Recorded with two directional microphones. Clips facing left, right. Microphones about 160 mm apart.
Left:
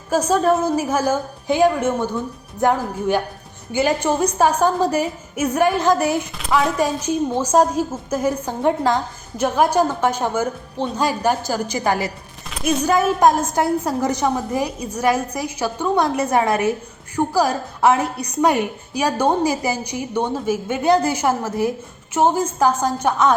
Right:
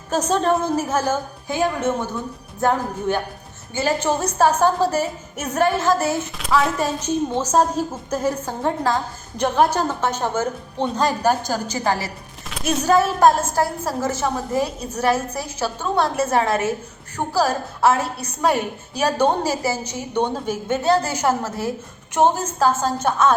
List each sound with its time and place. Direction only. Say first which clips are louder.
0.1 s a woman's voice: left 2 dB; 10° left (ahead or behind)